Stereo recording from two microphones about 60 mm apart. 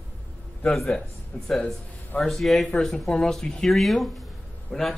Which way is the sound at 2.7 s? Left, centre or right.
Centre.